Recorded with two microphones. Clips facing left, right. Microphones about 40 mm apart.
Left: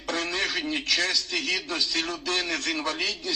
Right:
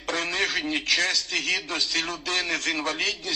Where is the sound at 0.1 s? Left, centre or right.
Right.